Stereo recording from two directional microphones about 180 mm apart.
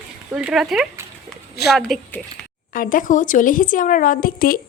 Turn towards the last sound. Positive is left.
turn(degrees=55)  # may be behind; listen again after turning